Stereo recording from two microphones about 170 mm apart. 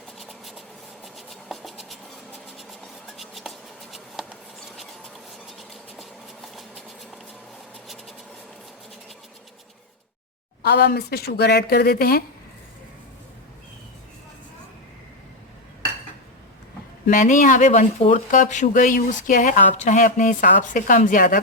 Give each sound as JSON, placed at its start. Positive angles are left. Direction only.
{"t": 0.2, "sound": "a sound", "side_deg": 0}
{"t": 1.0, "sound": "scratch", "side_deg": 0}
{"t": 10.6, "sound": "speech", "side_deg": 75}
{"t": 17.1, "sound": "speech", "side_deg": 50}